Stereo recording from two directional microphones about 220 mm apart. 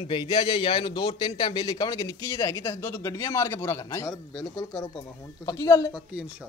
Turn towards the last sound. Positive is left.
turn(degrees=15)  # may be behind; listen again after turning